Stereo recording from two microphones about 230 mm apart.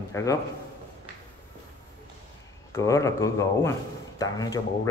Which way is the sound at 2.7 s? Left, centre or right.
Centre.